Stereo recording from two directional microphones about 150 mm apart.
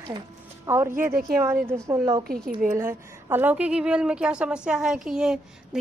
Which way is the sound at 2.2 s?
80° right.